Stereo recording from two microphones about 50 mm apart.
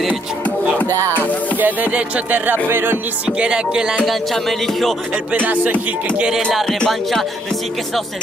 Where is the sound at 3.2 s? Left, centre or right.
Right.